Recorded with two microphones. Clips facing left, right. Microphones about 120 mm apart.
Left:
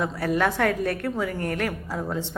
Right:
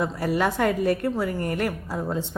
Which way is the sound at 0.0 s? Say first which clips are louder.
Even; 5° right (ahead or behind).